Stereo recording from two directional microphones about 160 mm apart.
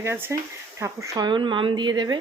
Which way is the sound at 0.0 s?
15° right (ahead or behind).